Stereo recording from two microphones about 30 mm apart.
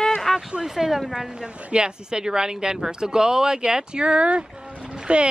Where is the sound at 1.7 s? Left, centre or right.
Right.